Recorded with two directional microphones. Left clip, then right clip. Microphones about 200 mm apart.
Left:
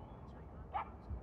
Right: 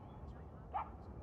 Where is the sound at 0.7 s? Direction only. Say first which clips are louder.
Left 1 dB; 65° left (ahead or behind).